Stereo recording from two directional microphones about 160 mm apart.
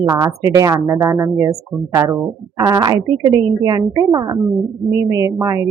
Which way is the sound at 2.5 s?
20° right (ahead or behind).